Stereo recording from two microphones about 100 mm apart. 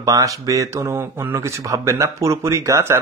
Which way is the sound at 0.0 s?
35° right (ahead or behind).